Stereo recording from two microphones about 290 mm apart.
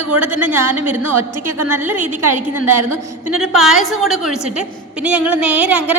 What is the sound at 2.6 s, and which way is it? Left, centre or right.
Speech, right.